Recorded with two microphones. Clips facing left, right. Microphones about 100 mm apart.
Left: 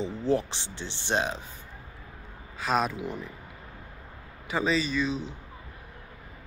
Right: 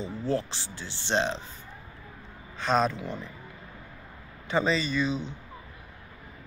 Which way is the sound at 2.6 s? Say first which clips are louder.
Right 2 dB; 5° left (ahead or behind).